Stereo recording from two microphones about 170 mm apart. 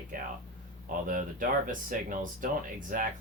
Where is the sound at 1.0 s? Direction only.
50° right (ahead or behind).